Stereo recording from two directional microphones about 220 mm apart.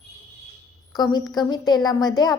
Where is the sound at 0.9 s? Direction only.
20° left (ahead or behind).